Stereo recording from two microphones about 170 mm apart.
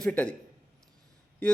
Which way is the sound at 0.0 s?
5° left (ahead or behind).